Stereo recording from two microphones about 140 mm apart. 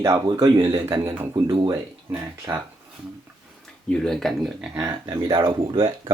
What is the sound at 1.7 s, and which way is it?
Speech, 20° right (ahead or behind).